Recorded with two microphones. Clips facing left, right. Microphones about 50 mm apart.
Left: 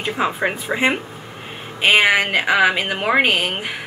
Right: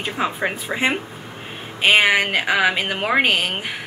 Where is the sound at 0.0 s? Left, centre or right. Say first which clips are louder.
Left 2 dB; centre.